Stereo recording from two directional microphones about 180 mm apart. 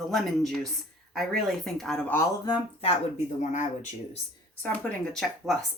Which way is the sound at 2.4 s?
25° left (ahead or behind).